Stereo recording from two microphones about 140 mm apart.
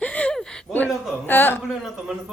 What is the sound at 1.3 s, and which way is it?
Speech, 15° left (ahead or behind).